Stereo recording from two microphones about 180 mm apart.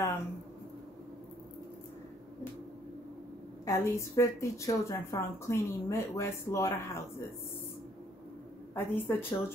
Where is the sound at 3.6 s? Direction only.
15° left (ahead or behind).